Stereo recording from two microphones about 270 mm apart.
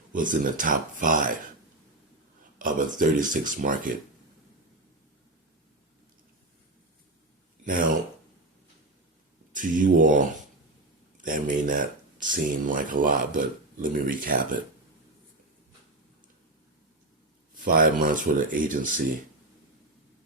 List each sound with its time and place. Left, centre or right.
0.1 s speech: right
2.6 s speech: right
7.6 s speech: right
9.5 s speech: right
17.5 s speech: right